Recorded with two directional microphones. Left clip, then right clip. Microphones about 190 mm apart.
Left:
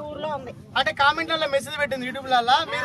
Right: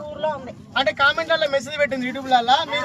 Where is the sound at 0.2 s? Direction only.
30° left (ahead or behind).